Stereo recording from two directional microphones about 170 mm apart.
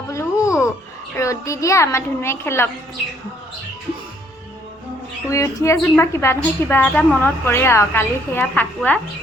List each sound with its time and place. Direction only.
0.1 s a sound: 20° left (ahead or behind)
1.1 s a woman's voice: 20° left (ahead or behind)
5.3 s a woman's voice: 20° left (ahead or behind)